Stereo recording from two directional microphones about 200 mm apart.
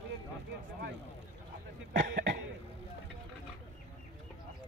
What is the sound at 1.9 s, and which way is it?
Cough, 50° right (ahead or behind).